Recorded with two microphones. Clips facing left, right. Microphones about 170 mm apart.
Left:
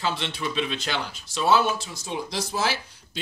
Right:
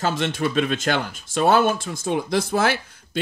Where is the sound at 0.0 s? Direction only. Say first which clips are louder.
Right 6 dB; 45° right (ahead or behind).